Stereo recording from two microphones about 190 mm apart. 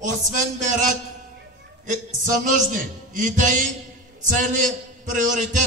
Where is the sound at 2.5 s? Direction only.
40° right (ahead or behind).